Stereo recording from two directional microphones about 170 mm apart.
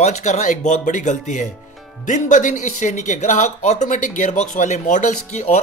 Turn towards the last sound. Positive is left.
turn(degrees=45)  # may be behind; listen again after turning